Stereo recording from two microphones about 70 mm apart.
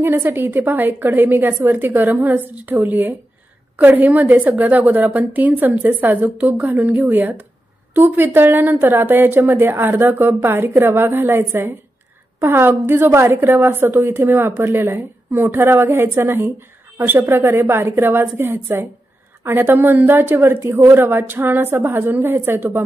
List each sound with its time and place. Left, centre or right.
0.0 s a woman's voice: right